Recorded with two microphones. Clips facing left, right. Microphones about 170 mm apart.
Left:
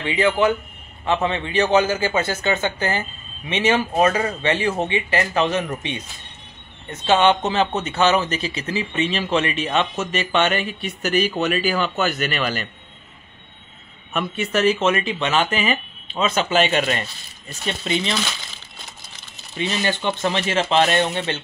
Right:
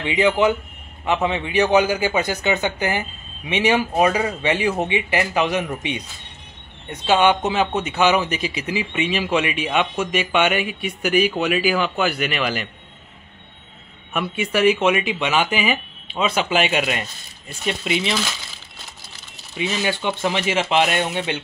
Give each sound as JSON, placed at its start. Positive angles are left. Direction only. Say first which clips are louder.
{"t": 0.0, "sound": "speech", "louder": "right 1 dB", "side_deg": -15}
{"t": 14.1, "sound": "speech", "louder": "even", "side_deg": -10}
{"t": 19.5, "sound": "speech", "louder": "even", "side_deg": -5}